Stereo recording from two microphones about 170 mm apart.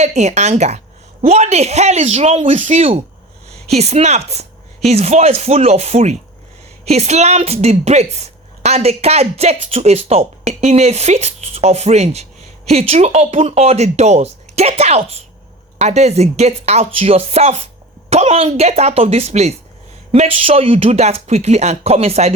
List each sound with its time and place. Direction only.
0.0 s speech: 40° right (ahead or behind)